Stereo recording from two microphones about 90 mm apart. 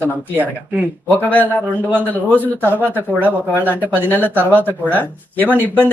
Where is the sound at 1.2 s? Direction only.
20° left (ahead or behind).